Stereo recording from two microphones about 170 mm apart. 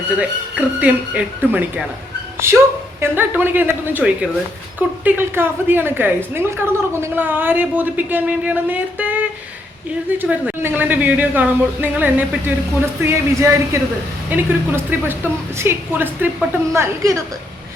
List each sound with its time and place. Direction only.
0.2 s a woman's voice: 10° right (ahead or behind)